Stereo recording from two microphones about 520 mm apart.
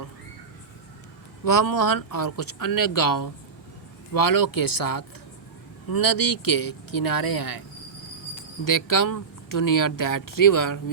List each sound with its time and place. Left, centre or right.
1.5 s speech: left
8.6 s speech: left